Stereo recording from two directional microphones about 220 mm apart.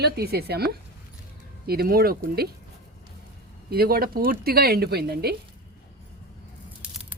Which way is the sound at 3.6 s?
45° right (ahead or behind).